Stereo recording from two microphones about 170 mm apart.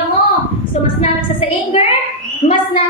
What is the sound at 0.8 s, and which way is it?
A woman's voice, 30° left (ahead or behind).